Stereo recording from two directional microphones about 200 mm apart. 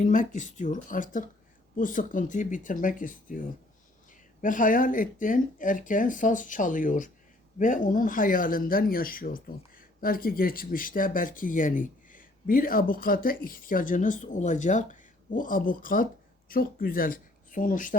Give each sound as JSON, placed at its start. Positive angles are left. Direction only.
{"t": 0.0, "sound": "speech", "side_deg": 40}